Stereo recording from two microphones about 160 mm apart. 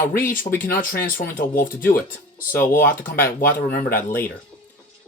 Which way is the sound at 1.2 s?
65° left (ahead or behind).